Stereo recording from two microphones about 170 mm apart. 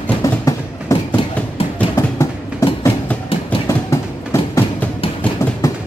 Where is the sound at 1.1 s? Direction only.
35° left (ahead or behind).